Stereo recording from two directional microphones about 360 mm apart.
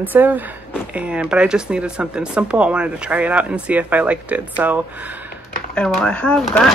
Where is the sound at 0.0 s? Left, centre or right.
Centre.